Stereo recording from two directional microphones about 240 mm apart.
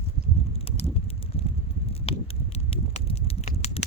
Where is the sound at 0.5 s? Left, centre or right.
Left.